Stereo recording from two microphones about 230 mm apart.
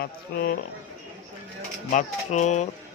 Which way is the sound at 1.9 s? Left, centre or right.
Left.